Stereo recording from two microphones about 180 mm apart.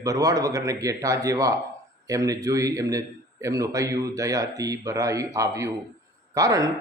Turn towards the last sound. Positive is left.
turn(degrees=-20)  # may be behind; listen again after turning